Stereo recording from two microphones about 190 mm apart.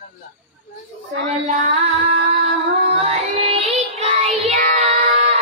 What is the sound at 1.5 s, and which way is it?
Music, 40° right (ahead or behind).